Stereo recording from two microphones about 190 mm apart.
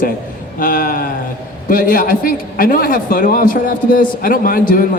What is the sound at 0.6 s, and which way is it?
A man's voice, 50° left (ahead or behind).